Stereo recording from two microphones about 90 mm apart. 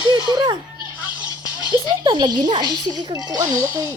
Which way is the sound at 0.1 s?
55° right (ahead or behind).